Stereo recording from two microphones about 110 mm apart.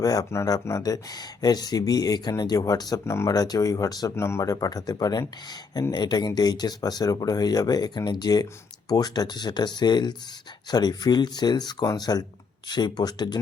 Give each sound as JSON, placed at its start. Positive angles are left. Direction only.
{"t": 0.0, "sound": "speech", "side_deg": 35}
{"t": 4.1, "sound": "speech", "side_deg": 25}